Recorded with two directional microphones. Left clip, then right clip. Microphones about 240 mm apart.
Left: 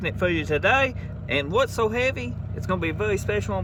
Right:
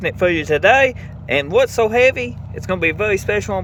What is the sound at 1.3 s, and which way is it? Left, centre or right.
Speech, centre.